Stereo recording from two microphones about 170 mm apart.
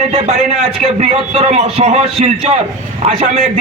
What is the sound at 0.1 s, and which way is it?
A man's voice, 35° right (ahead or behind).